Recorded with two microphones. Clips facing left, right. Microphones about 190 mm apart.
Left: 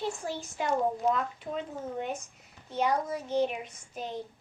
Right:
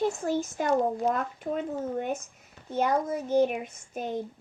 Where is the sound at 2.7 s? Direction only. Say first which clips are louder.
Right 3 dB; 50° right (ahead or behind).